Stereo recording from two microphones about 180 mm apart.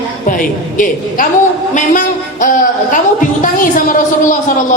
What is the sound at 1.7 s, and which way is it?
Music, 45° left (ahead or behind).